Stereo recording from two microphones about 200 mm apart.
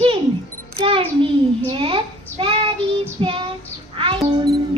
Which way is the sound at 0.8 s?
25° right (ahead or behind).